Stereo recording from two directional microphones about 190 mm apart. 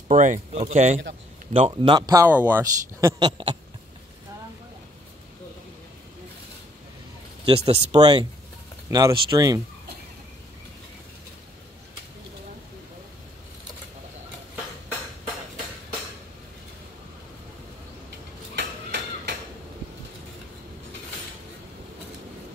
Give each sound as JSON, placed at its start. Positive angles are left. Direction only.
{"t": 0.1, "sound": "speech", "side_deg": -40}
{"t": 1.5, "sound": "a man's voice", "side_deg": -25}
{"t": 7.4, "sound": "speech", "side_deg": -30}
{"t": 8.0, "sound": "a man's voice", "side_deg": -25}
{"t": 18.6, "sound": "a sound", "side_deg": -60}